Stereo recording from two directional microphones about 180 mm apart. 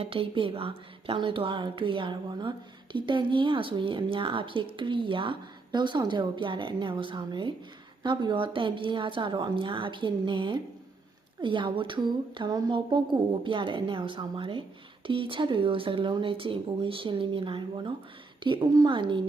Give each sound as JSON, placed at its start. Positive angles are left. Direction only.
{"t": 0.0, "sound": "a woman's voice", "side_deg": -30}